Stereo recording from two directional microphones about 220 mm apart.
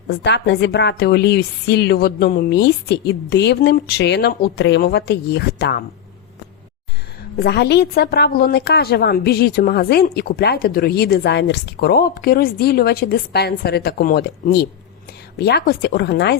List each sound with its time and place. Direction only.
0.1 s speech: 50° left (ahead or behind)
7.3 s speech: 45° left (ahead or behind)